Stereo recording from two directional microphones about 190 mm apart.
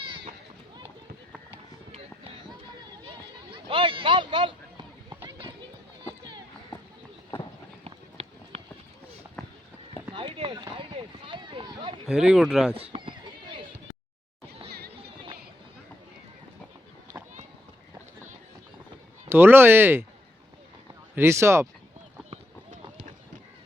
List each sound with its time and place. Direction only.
0.0 s run: 30° right (ahead or behind)
3.1 s a sound: 25° right (ahead or behind)
7.9 s run: 30° right (ahead or behind)
10.1 s run: 25° right (ahead or behind)
11.3 s a sound: 25° right (ahead or behind)
12.0 s speech: 5° right (ahead or behind)
12.7 s neigh: 30° right (ahead or behind)
14.7 s music: 55° right (ahead or behind)
19.3 s speech: 10° right (ahead or behind)
21.2 s speech: 15° right (ahead or behind)
22.3 s clip-clop: 35° right (ahead or behind)